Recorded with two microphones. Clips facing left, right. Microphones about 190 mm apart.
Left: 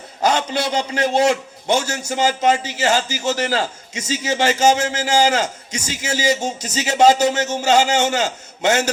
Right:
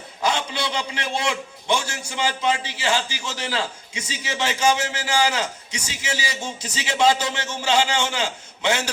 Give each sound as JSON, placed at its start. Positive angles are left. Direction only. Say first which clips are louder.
{"t": 0.2, "sound": "a man's voice", "louder": "left 5 dB", "side_deg": 40}